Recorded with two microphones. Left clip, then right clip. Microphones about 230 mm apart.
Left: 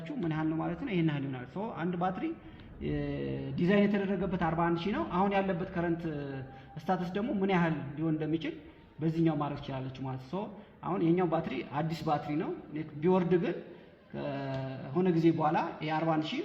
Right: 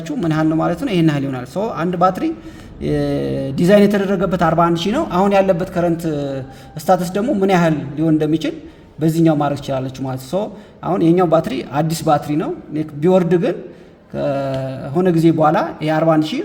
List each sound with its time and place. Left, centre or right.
0.3 s speech: right
10.8 s speech: right